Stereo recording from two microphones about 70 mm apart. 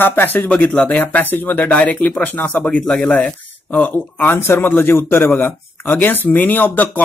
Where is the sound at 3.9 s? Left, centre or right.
Left.